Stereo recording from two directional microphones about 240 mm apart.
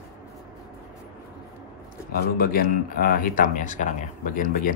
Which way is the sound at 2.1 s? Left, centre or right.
Left.